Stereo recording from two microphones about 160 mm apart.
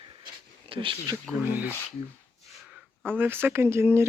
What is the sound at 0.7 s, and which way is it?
Speech, 30° right (ahead or behind).